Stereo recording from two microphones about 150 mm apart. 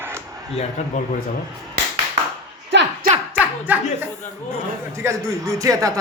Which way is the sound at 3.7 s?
10° right (ahead or behind).